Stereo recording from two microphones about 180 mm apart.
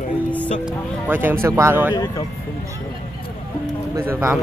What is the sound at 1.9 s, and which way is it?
Speech, 20° left (ahead or behind).